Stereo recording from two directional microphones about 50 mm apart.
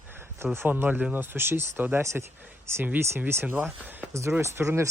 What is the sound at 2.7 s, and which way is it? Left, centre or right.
Speech, right.